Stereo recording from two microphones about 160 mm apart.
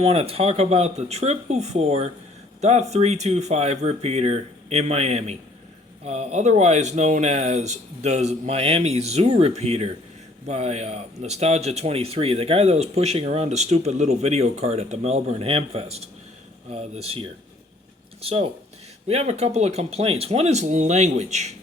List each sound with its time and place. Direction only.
0.0 s speech: 40° right (ahead or behind)